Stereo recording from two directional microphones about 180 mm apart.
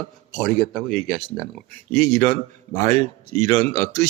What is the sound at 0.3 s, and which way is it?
Speech, centre (ahead or behind).